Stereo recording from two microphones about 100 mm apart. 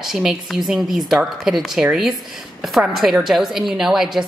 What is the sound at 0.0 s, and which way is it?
Speech, 5° right (ahead or behind).